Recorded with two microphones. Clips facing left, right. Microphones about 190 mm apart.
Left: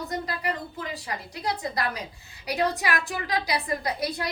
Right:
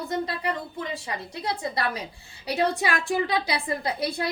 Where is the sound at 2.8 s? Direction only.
30° right (ahead or behind).